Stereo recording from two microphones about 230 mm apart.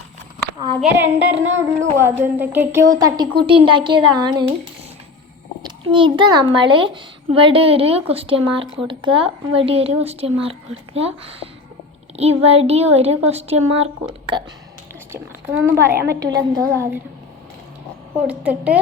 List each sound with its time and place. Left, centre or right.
0.8 s a woman's voice: centre
5.6 s a child's voice: right
15.1 s a woman's voice: centre
18.3 s a woman's voice: centre